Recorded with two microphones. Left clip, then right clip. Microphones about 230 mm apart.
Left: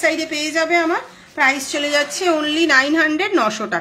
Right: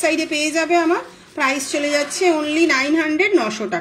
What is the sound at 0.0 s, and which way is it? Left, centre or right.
A woman's voice, centre.